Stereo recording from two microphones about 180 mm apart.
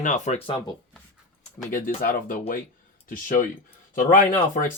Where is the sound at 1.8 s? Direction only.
55° left (ahead or behind).